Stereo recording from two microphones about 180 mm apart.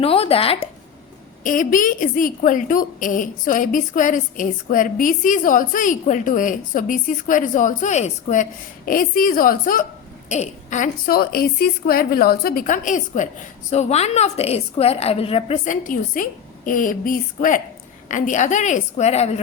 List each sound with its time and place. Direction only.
0.0 s speech: 30° left (ahead or behind)
1.5 s a woman's voice: 45° left (ahead or behind)